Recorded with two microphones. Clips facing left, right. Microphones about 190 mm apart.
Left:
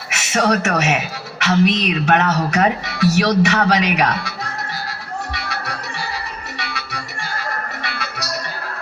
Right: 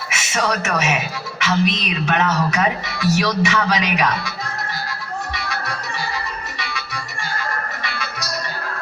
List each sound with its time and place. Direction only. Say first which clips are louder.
0.1 s a sound: left 5 dB; 65° left (ahead or behind)
1.4 s speech: left 4 dB; 65° left (ahead or behind)
4.9 s music: even; 65° left (ahead or behind)
6.6 s music: left 1 dB; 65° left (ahead or behind)